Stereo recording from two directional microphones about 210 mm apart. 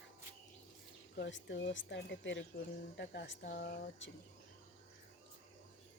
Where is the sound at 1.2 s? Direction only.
60° left (ahead or behind).